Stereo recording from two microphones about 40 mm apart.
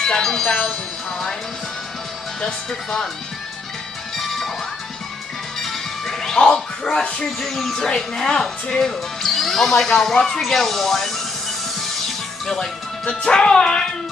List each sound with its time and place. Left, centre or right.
0.0 s speech: centre
2.4 s speech: centre
5.6 s music: centre; by 7.2 s left
7.3 s speech: centre
9.2 s speech: centre
11.8 s music: centre
13.2 s music: centre